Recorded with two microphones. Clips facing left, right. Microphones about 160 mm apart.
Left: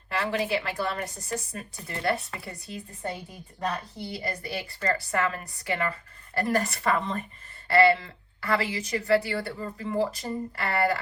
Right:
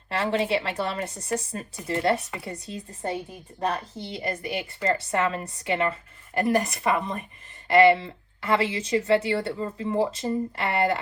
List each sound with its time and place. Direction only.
0.1 s a woman's voice: 25° right (ahead or behind)